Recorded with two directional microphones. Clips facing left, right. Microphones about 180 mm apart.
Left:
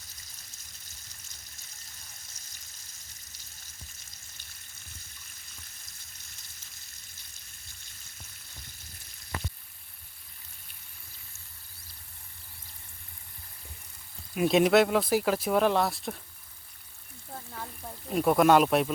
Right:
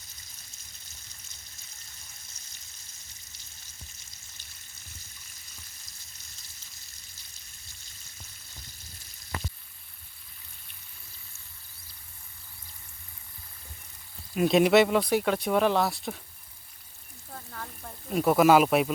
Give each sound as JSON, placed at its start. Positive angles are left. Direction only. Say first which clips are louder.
{"t": 14.3, "sound": "speech", "louder": "right 1 dB", "side_deg": 0}
{"t": 17.3, "sound": "frying", "louder": "left 1 dB", "side_deg": 15}
{"t": 18.1, "sound": "speech", "louder": "right 1 dB", "side_deg": 0}